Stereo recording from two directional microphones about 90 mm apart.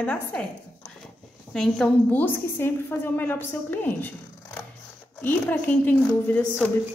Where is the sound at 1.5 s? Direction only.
5° left (ahead or behind).